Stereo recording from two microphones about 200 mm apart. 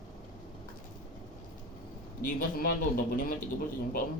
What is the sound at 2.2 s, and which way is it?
A man's voice, 45° left (ahead or behind).